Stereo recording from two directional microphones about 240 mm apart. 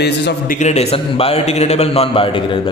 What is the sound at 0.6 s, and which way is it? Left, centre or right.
A man's voice, left.